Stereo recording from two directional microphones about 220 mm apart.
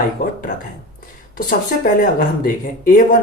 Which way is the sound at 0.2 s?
40° left (ahead or behind).